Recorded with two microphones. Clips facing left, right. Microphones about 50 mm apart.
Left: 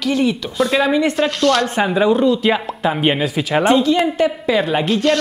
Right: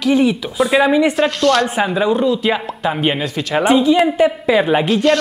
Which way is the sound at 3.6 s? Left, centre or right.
Centre.